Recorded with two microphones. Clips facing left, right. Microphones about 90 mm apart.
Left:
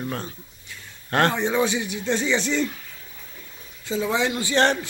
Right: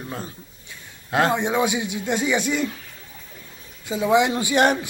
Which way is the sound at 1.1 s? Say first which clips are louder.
Right 1 dB; 15° right (ahead or behind).